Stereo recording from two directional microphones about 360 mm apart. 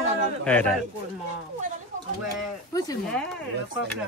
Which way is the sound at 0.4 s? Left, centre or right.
Centre.